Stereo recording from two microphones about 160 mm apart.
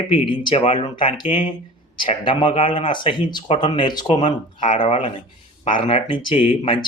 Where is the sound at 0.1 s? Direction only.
30° left (ahead or behind).